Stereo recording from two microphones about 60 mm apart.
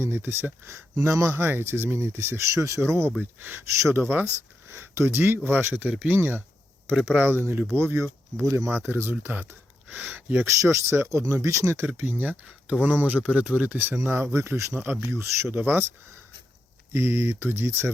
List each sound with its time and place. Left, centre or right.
0.0 s speech: right
1.1 s speech: right
1.4 s speech: right
2.5 s speech: right
3.2 s speech: right
7.8 s speech: right
10.4 s speech: right
11.9 s speech: right
12.6 s speech: right
14.3 s speech: right
14.8 s speech: right
15.2 s speech: right
15.6 s speech: right
16.9 s speech: right